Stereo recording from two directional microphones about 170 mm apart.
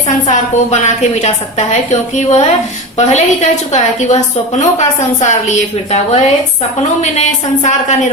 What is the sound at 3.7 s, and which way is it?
A woman's voice, 40° left (ahead or behind).